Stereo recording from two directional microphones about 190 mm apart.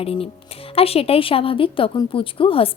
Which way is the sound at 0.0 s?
30° left (ahead or behind).